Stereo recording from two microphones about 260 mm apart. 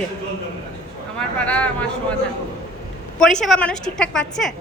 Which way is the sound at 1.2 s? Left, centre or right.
Centre.